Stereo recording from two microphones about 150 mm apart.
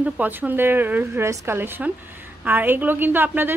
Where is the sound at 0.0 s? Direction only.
10° right (ahead or behind).